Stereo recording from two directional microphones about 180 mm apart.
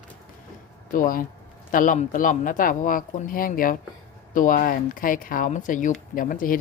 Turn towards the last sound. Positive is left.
turn(degrees=50)  # may be behind; listen again after turning